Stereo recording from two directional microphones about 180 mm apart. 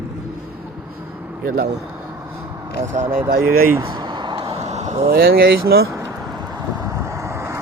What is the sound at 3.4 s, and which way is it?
Speech, 15° right (ahead or behind).